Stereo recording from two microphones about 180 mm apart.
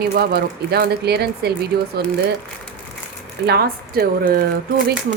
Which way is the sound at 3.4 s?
60° right (ahead or behind).